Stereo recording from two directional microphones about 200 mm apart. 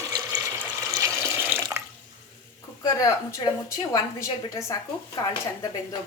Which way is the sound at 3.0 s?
15° left (ahead or behind).